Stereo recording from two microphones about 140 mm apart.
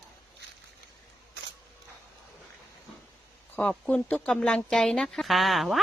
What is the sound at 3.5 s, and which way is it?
Speech, 10° left (ahead or behind).